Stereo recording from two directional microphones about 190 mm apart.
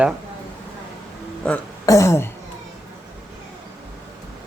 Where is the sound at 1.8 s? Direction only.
15° left (ahead or behind).